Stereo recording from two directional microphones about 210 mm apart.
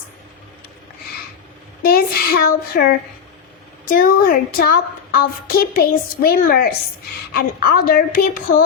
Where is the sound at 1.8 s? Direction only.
45° left (ahead or behind).